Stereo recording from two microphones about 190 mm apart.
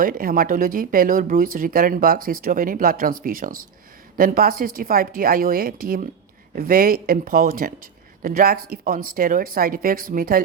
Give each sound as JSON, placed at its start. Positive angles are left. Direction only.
{"t": 0.0, "sound": "speech", "side_deg": -45}